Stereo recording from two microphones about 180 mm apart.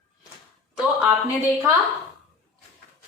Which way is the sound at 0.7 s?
5° right (ahead or behind).